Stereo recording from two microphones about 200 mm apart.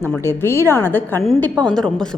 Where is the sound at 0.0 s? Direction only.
10° left (ahead or behind).